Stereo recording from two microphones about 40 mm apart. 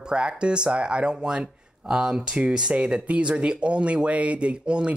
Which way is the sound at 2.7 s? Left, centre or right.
Right.